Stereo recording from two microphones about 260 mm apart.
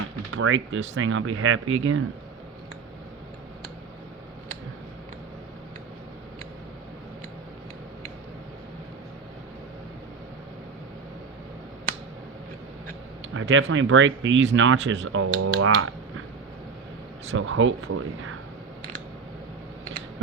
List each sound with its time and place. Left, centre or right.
0.3 s speech: right
13.3 s speech: right
17.3 s speech: right